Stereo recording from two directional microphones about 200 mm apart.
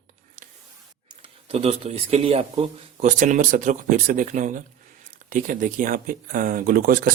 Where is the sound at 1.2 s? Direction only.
30° right (ahead or behind).